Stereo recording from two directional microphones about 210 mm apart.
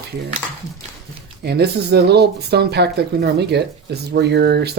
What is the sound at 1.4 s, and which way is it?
Speech, 50° right (ahead or behind).